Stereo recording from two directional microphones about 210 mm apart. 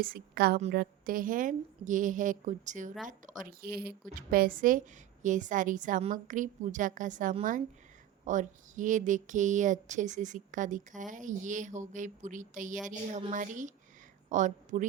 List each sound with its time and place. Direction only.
0.0 s a woman's voice: 45° right (ahead or behind)
3.6 s a woman's voice: 45° right (ahead or behind)